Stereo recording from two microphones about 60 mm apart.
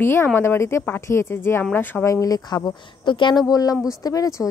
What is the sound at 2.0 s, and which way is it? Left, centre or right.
Speech, left.